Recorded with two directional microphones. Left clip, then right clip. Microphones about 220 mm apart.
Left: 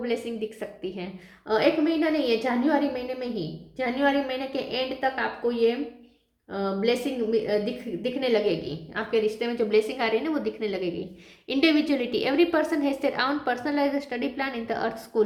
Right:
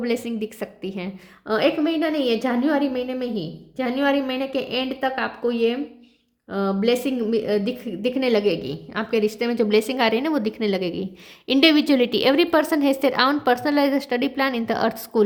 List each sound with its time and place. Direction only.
0.0 s a woman's voice: 45° right (ahead or behind)